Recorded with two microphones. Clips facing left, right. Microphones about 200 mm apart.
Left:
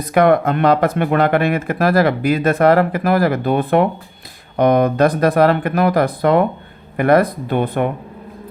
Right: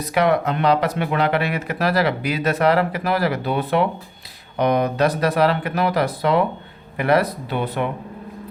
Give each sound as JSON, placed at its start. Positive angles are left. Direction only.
{"t": 0.0, "sound": "speech", "side_deg": 50}